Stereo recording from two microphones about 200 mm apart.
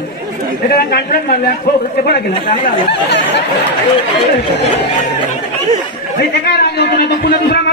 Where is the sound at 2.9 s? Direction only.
60° left (ahead or behind).